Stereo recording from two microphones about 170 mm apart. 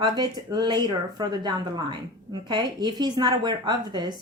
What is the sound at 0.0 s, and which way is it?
Speech, 25° right (ahead or behind).